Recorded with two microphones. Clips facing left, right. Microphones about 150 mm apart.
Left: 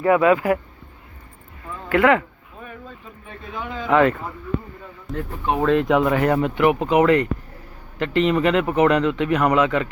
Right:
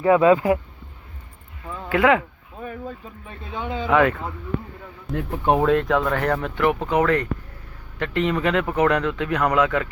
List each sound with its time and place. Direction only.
0.0 s speech: 25° right (ahead or behind)
1.9 s speech: 10° right (ahead or behind)
3.5 s speech: 30° right (ahead or behind)
3.8 s speech: centre (ahead or behind)
5.9 s speech: 15° left (ahead or behind)